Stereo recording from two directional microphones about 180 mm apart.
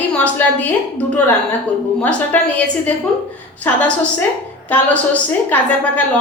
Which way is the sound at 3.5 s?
10° left (ahead or behind).